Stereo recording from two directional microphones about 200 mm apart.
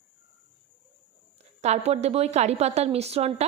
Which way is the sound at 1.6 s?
35° right (ahead or behind).